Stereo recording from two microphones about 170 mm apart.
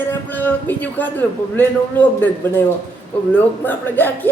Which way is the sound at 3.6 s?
10° left (ahead or behind).